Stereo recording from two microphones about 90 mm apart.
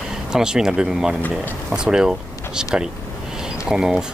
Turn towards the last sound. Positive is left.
turn(degrees=-5)  # may be behind; listen again after turning